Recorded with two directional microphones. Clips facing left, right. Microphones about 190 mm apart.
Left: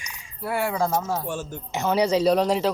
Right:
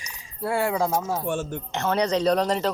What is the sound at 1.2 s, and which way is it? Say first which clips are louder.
Speech: right 3 dB; 55° right (ahead or behind).